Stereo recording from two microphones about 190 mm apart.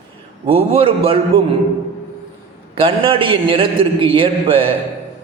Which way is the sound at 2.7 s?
30° right (ahead or behind).